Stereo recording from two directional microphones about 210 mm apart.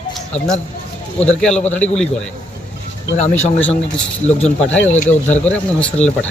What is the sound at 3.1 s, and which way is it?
Speech, 35° left (ahead or behind).